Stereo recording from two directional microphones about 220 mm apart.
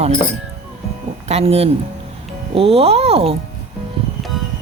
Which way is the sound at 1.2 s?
30° right (ahead or behind).